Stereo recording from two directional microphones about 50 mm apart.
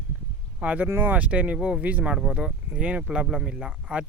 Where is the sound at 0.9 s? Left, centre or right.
Right.